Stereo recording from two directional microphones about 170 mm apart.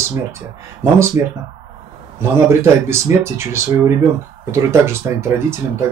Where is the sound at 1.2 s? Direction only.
15° right (ahead or behind).